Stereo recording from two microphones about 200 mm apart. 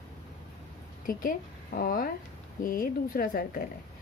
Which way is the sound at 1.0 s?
45° left (ahead or behind).